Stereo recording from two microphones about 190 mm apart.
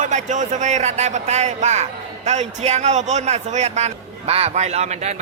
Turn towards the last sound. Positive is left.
turn(degrees=-35)  # may be behind; listen again after turning